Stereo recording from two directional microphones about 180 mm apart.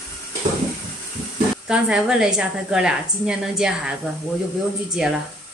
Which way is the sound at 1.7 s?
5° right (ahead or behind).